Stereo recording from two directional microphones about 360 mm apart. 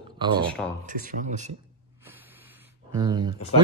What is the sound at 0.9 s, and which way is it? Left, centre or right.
Speech, right.